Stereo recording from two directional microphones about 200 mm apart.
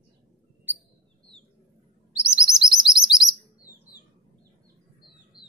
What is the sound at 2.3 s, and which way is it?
Chirp, 5° right (ahead or behind).